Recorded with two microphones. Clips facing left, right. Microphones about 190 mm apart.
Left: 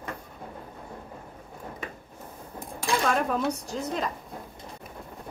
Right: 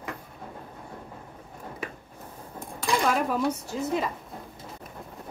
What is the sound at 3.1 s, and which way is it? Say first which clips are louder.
Speech: even; 5° right (ahead or behind).